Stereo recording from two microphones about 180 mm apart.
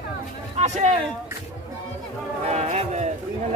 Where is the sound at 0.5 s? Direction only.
40° right (ahead or behind).